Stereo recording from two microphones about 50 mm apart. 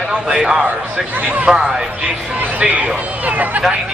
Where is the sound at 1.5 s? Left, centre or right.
Centre.